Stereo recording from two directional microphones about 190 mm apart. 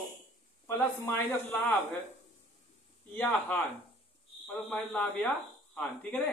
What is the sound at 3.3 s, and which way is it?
Speech, 10° left (ahead or behind).